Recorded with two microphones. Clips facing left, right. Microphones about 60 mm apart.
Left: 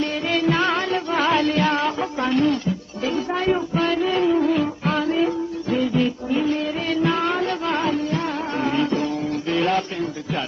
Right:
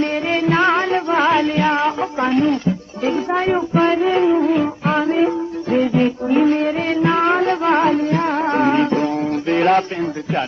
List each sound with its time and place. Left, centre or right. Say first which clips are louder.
0.0 s music: right 3 dB; right
5.7 s music: right 5 dB; right